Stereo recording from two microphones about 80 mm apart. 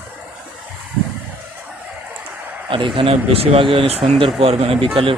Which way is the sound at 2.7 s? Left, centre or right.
Right.